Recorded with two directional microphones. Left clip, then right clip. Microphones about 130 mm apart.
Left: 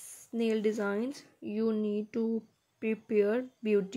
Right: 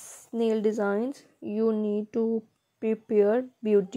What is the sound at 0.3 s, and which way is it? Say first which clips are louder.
Speech: right 5 dB; 50° right (ahead or behind).